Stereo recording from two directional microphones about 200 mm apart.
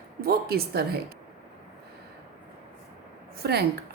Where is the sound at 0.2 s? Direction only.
50° right (ahead or behind).